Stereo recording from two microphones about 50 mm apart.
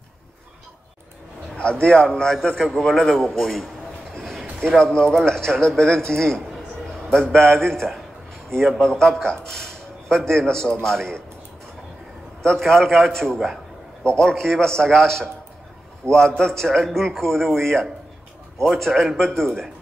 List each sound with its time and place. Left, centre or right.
1.6 s a man's voice: left
12.5 s a man's voice: centre